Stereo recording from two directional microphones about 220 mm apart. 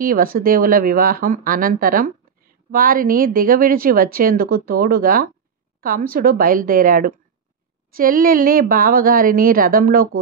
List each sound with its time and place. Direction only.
0.0 s speech: 40° right (ahead or behind)